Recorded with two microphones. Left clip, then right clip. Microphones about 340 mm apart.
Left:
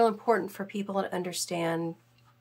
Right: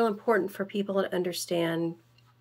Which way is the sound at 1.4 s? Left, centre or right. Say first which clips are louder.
Even; left.